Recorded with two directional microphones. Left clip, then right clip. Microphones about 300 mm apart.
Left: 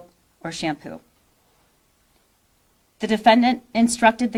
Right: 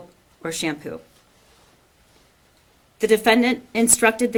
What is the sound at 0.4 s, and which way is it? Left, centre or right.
Speech, left.